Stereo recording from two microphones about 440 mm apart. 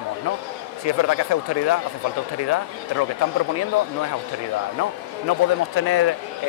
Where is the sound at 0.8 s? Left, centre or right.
Left.